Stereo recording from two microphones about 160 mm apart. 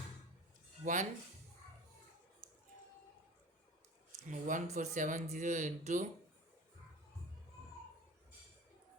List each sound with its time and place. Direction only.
0.8 s speech: 55° right (ahead or behind)
4.3 s speech: 50° right (ahead or behind)